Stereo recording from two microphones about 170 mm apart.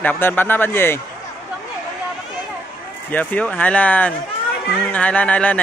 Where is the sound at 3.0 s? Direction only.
10° left (ahead or behind).